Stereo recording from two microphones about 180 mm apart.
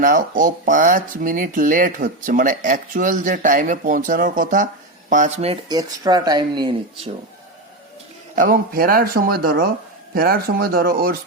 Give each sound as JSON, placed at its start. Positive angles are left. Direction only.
{"t": 0.0, "sound": "speech", "side_deg": -50}
{"t": 5.6, "sound": "speech", "side_deg": -20}
{"t": 8.4, "sound": "speech", "side_deg": -55}